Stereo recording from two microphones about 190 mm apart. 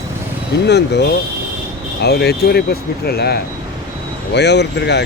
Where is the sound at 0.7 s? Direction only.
60° left (ahead or behind).